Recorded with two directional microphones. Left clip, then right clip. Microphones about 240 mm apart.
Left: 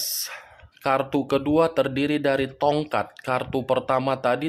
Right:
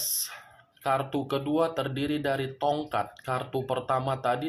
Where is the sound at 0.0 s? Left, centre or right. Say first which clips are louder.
Left 4 dB; left.